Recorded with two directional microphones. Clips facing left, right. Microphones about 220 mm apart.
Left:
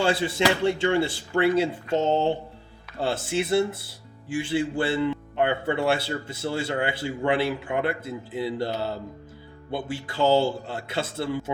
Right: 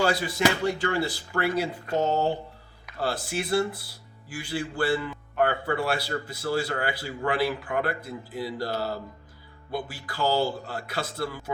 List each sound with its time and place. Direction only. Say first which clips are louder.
0.0 s a man's voice: left 1 dB; 25° left (ahead or behind)